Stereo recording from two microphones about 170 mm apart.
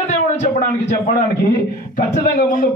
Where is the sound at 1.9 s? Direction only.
50° left (ahead or behind).